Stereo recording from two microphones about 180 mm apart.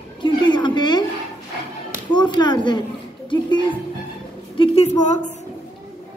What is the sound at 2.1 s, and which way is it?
Speech, 25° left (ahead or behind).